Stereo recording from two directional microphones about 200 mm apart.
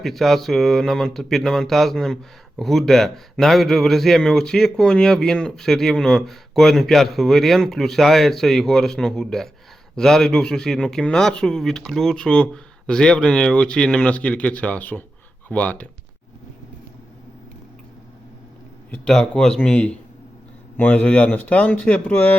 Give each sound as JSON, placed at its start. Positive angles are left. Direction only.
{"t": 0.0, "sound": "a man's voice", "side_deg": 0}
{"t": 18.9, "sound": "a man's voice", "side_deg": 5}